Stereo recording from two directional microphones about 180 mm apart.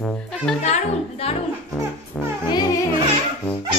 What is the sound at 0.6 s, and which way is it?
Speech, 35° left (ahead or behind).